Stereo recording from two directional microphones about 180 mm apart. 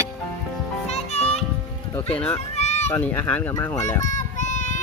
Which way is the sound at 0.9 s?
35° left (ahead or behind).